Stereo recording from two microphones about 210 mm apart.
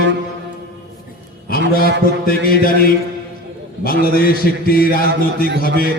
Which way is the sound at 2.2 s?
45° left (ahead or behind).